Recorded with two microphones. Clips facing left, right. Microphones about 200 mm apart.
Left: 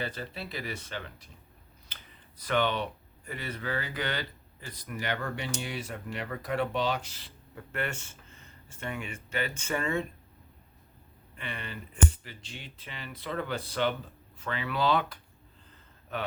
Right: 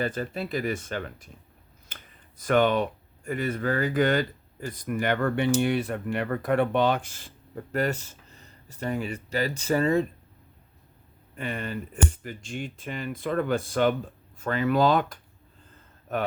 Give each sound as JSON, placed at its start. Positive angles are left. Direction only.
{"t": 0.0, "sound": "speech", "side_deg": -50}
{"t": 1.9, "sound": "a sound", "side_deg": -50}
{"t": 2.4, "sound": "speech", "side_deg": -50}
{"t": 11.3, "sound": "a man's voice", "side_deg": -45}